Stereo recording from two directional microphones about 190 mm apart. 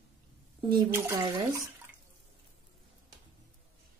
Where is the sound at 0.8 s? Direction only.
10° right (ahead or behind).